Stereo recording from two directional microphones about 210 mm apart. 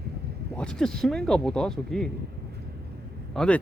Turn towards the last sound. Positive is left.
turn(degrees=5)  # may be behind; listen again after turning